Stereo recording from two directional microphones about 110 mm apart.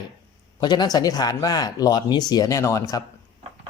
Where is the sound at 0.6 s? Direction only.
40° left (ahead or behind).